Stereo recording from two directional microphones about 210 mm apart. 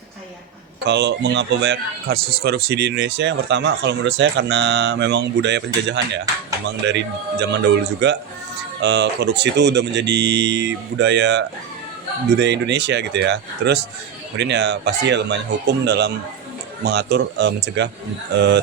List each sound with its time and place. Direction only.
0.9 s a man's voice: 55° right (ahead or behind)